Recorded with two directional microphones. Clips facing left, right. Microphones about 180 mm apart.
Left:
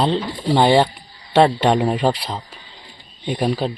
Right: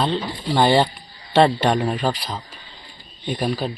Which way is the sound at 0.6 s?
15° left (ahead or behind).